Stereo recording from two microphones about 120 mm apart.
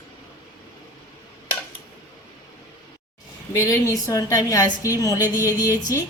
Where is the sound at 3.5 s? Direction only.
25° left (ahead or behind).